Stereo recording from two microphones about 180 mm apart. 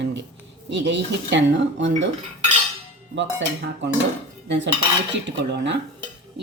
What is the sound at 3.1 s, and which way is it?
Speech, 85° right.